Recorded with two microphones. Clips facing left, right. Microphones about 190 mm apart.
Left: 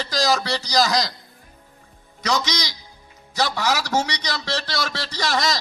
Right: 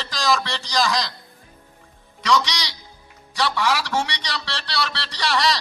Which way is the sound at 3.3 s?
40° left (ahead or behind).